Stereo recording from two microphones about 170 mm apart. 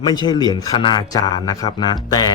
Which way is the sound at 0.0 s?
25° left (ahead or behind).